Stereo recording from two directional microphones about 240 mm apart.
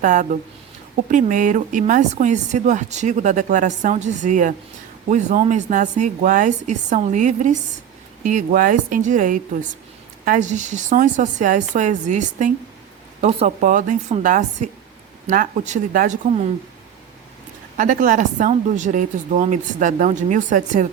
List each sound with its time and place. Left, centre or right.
0.0 s speech: right
17.7 s speech: right